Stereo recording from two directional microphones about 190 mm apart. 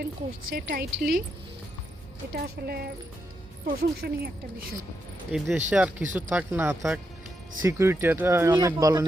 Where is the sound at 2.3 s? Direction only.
55° right (ahead or behind).